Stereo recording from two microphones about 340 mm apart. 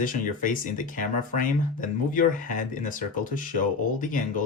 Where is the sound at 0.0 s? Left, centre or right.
Left.